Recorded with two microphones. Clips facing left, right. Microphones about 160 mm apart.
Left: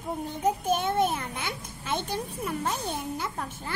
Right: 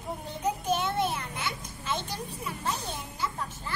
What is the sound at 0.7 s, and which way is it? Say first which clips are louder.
A child's voice: left 1 dB; 50° left (ahead or behind).